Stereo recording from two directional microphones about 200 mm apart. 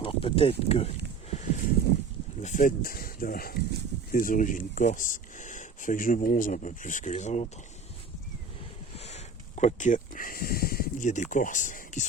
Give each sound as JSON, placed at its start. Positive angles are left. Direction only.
{"t": 0.0, "sound": "speech", "side_deg": 25}
{"t": 2.4, "sound": "speech", "side_deg": 40}
{"t": 9.0, "sound": "speech", "side_deg": 35}